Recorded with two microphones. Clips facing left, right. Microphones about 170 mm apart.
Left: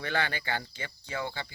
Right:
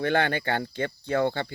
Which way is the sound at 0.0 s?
55° right (ahead or behind).